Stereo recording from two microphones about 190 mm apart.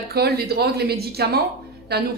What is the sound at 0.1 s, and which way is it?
Speech, 55° right (ahead or behind).